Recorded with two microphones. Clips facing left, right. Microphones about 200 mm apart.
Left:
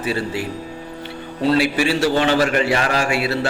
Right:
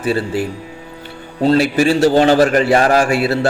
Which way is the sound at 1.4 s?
45° right (ahead or behind).